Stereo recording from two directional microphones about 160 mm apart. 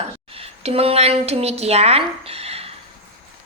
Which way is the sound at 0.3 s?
40° right (ahead or behind).